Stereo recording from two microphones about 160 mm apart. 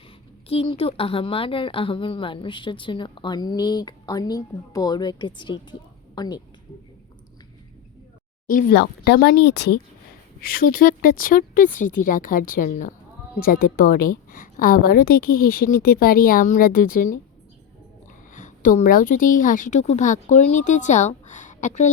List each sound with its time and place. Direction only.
0.4 s a woman's voice: 35° left (ahead or behind)
8.4 s speech: 60° left (ahead or behind); by 9.8 s 90° left
10.4 s a woman's voice: 65° left (ahead or behind)
18.3 s a woman's voice: 55° left (ahead or behind)